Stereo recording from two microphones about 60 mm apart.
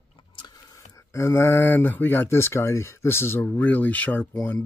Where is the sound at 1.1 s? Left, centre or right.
Left.